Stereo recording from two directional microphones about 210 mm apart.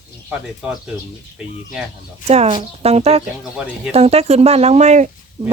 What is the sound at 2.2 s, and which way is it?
Speech, 30° right (ahead or behind).